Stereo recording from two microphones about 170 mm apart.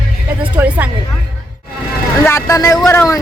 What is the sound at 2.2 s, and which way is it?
Speech, 15° left (ahead or behind).